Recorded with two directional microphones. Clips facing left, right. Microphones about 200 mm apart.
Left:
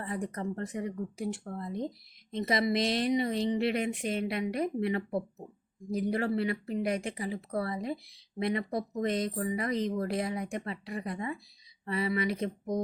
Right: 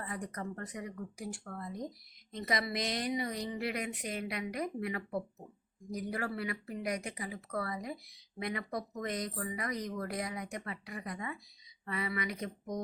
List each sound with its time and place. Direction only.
0.0 s speech: 25° left (ahead or behind)